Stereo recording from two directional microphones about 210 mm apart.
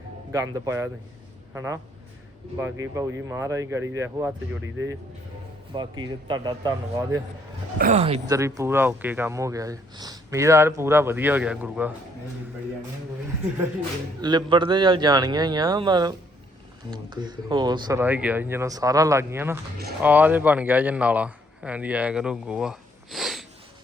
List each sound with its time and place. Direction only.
0.3 s speech: 15° right (ahead or behind)
5.7 s a man's voice: 20° right (ahead or behind)
7.8 s speech: 40° right (ahead or behind)
8.3 s speech: 15° right (ahead or behind)
14.2 s a man's voice: 20° right (ahead or behind)
18.0 s speech: 10° right (ahead or behind)